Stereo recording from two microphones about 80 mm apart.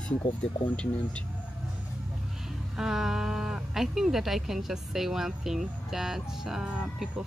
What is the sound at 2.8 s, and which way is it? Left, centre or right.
Speech, centre.